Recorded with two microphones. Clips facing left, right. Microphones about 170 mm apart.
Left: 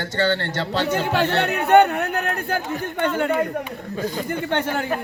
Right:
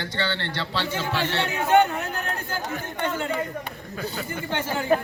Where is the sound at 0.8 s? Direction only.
65° left (ahead or behind).